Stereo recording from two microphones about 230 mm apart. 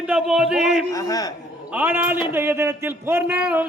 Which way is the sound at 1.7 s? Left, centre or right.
Centre.